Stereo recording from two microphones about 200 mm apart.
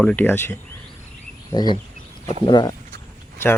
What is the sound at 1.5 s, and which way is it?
Speech, 20° left (ahead or behind).